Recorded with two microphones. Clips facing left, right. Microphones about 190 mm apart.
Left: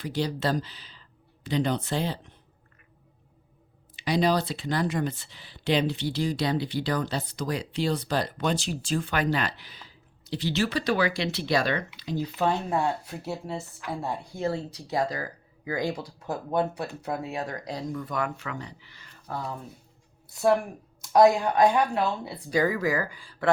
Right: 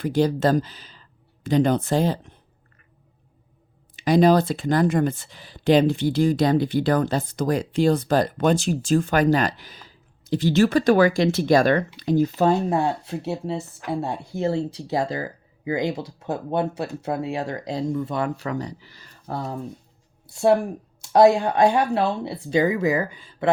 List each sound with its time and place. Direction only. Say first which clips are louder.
0.0 s speech: right 8 dB; 50° right (ahead or behind)
3.9 s speech: right 8 dB; 45° right (ahead or behind); by 23.5 s 20° right (ahead or behind)